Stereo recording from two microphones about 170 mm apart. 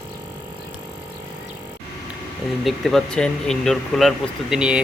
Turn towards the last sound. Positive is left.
turn(degrees=-5)  # may be behind; listen again after turning